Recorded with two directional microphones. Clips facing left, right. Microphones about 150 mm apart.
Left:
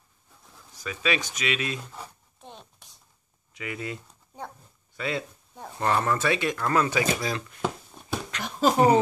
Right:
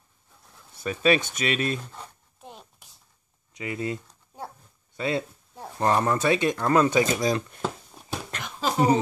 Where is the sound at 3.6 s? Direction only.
30° right (ahead or behind).